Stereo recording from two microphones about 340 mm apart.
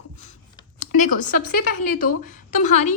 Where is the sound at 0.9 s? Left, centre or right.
Left.